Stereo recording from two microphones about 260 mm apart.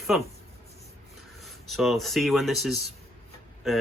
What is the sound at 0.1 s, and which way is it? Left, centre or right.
Speech, centre.